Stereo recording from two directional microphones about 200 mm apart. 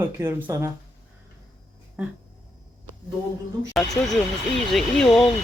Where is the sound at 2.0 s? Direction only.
5° right (ahead or behind).